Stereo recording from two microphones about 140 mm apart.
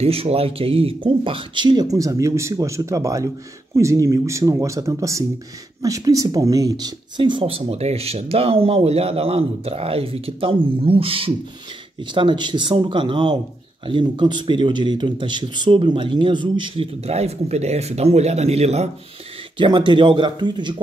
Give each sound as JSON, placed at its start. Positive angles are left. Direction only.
{"t": 0.0, "sound": "speech", "side_deg": -45}
{"t": 19.5, "sound": "speech", "side_deg": -35}